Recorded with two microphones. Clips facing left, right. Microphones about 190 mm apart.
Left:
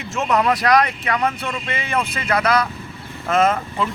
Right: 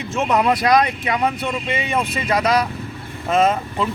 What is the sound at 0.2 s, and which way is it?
Speech, 15° right (ahead or behind).